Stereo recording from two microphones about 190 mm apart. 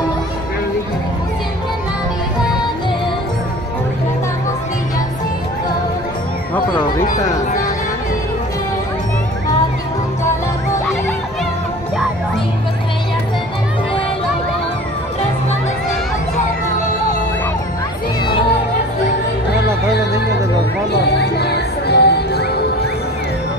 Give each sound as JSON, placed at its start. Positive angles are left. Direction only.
{"t": 20.9, "sound": "music", "side_deg": 60}